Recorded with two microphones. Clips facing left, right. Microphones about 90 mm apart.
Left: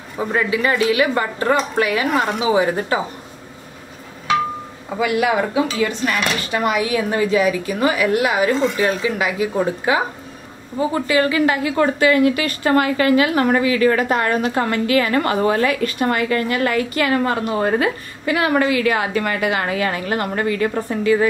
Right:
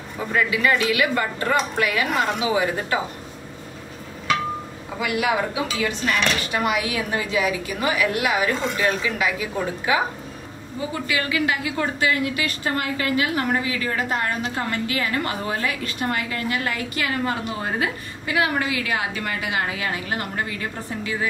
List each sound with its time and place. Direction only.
0.3 s a woman's voice: 35° left (ahead or behind)
5.0 s a woman's voice: 45° left (ahead or behind)
11.1 s a woman's voice: 35° left (ahead or behind)
11.8 s a woman's voice: 60° left (ahead or behind)